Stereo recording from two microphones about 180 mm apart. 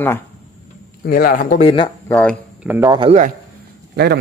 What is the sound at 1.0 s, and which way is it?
Speech, 55° left (ahead or behind).